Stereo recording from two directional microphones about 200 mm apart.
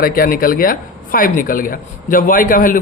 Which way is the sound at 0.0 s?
45° left (ahead or behind).